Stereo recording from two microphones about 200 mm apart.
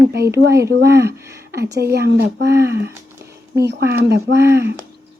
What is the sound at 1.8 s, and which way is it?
Speech, 50° right (ahead or behind).